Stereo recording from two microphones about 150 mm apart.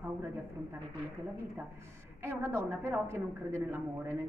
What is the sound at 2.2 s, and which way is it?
A woman's voice, 15° right (ahead or behind).